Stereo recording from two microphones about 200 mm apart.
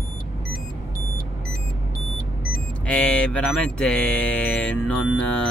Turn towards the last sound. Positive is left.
turn(degrees=5)  # may be behind; listen again after turning